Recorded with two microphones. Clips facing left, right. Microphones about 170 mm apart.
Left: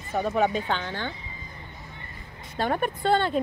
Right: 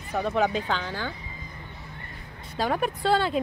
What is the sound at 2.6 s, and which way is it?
Speech, centre (ahead or behind).